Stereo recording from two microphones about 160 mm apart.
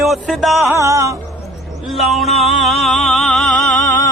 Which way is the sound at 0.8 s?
20° right (ahead or behind).